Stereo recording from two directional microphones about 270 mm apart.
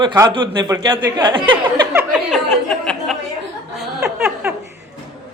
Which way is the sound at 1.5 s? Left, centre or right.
Centre.